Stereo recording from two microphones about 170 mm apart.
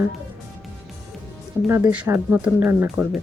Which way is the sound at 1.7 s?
10° right (ahead or behind).